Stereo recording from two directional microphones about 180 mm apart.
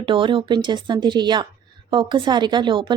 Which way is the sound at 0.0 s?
25° right (ahead or behind).